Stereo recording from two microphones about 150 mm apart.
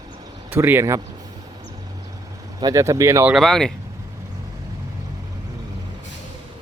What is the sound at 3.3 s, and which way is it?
Speech, centre (ahead or behind).